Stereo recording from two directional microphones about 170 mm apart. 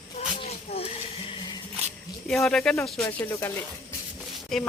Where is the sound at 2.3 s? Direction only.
5° left (ahead or behind).